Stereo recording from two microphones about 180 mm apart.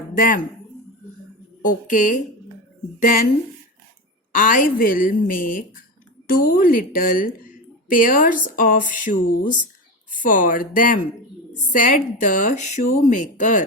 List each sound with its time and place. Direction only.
0.1 s speech: 45° left (ahead or behind)
1.6 s a woman's voice: 45° left (ahead or behind)
4.3 s a woman's voice: 50° left (ahead or behind)